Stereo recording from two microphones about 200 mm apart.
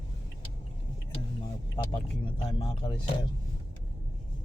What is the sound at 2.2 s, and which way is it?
Speech, 25° left (ahead or behind).